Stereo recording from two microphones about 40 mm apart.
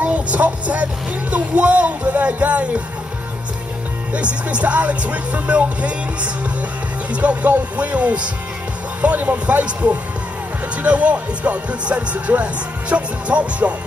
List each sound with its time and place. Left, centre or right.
0.0 s vehicle: right
1.3 s music: right
4.1 s music: right